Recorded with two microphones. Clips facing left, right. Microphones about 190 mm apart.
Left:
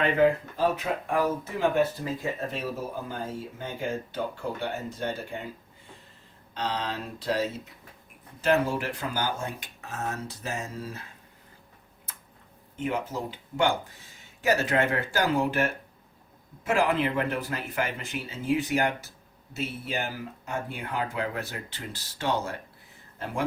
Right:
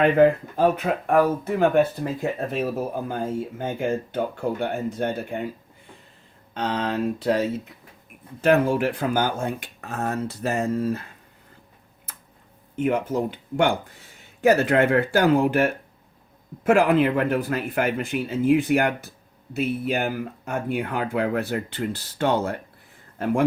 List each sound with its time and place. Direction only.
0.0 s speech: 55° right (ahead or behind)
3.6 s speech: 55° right (ahead or behind)
6.5 s speech: 55° right (ahead or behind)
12.7 s speech: 55° right (ahead or behind)